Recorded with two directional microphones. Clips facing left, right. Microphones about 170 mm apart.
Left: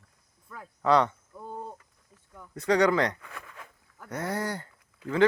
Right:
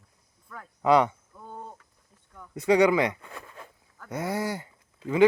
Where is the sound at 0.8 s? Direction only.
10° right (ahead or behind).